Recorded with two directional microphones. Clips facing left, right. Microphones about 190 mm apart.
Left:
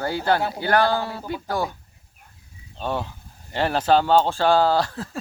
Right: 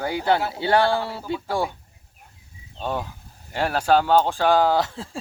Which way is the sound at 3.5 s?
5° right (ahead or behind).